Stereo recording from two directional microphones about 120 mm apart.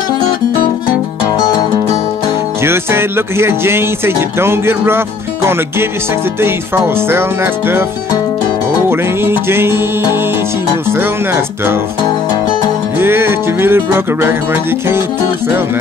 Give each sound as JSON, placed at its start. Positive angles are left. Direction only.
{"t": 2.6, "sound": "speech", "side_deg": -20}
{"t": 6.4, "sound": "speech", "side_deg": -20}
{"t": 8.8, "sound": "speech", "side_deg": -20}
{"t": 12.9, "sound": "speech", "side_deg": -20}